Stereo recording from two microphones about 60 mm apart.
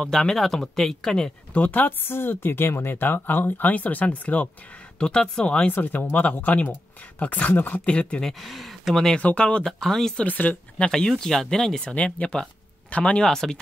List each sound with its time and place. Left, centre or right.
0.0 s speech: centre
1.5 s speech: left
4.9 s speech: centre
5.7 s speech: left
7.8 s speech: centre
8.3 s speech: centre
9.2 s speech: left
9.7 s speech: centre
10.1 s speech: left
10.9 s speech: centre
11.9 s speech: left
13.3 s speech: centre